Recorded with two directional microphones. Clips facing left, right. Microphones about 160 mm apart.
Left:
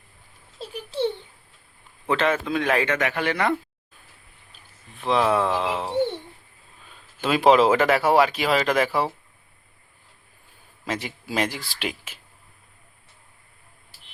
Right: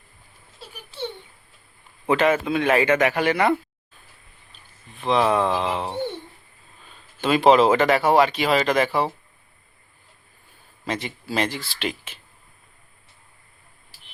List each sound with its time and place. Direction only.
2.0 s a man's voice: 10° right (ahead or behind)
2.8 s a man's voice: 15° right (ahead or behind)
4.9 s speech: centre (ahead or behind)
7.2 s speech: 5° left (ahead or behind)
10.8 s speech: 5° left (ahead or behind)